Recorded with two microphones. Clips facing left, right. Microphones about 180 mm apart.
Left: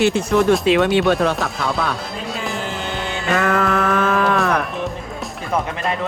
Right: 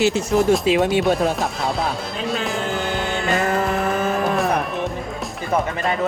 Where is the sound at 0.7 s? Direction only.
70° left (ahead or behind).